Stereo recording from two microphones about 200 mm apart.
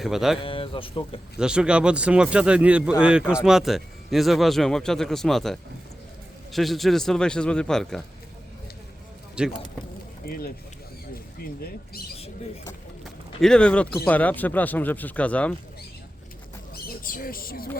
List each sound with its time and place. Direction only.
0.0 s speech: centre (ahead or behind)
0.4 s speech: 25° left (ahead or behind)
1.4 s speech: 5° right (ahead or behind)
9.3 s speech: 5° right (ahead or behind)
10.2 s speech: 50° left (ahead or behind)
11.6 s speech: 50° left (ahead or behind)
13.4 s speech: 5° left (ahead or behind)
17.0 s speech: 45° left (ahead or behind)